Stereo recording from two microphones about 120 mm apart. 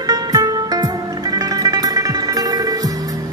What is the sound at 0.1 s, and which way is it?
Music, 30° right (ahead or behind).